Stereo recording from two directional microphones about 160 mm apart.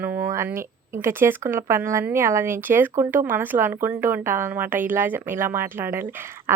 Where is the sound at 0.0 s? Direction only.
15° right (ahead or behind).